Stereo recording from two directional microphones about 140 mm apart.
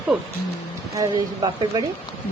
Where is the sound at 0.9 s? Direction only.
30° right (ahead or behind).